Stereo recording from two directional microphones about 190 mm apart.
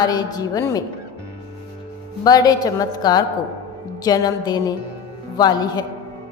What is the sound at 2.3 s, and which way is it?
A woman's voice, 20° left (ahead or behind).